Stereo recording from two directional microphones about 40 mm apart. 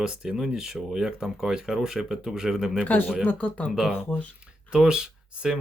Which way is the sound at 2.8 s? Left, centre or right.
Left.